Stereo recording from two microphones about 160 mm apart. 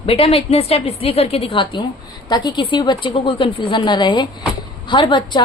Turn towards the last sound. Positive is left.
turn(degrees=30)  # may be behind; listen again after turning